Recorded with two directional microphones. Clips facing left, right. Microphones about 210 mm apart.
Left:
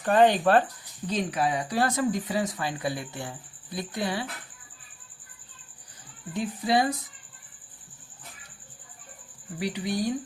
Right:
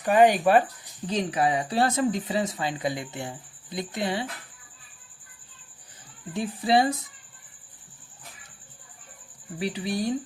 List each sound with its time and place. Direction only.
0.0 s speech: 10° right (ahead or behind)
1.0 s speech: 25° right (ahead or behind)
6.3 s speech: 25° right (ahead or behind)
9.6 s speech: 25° right (ahead or behind)